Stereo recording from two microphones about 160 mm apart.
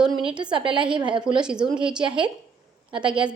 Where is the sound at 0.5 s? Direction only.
30° right (ahead or behind).